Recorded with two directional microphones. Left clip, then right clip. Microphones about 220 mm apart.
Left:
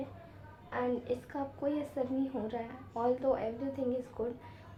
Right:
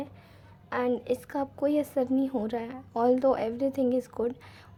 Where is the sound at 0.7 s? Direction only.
45° right (ahead or behind).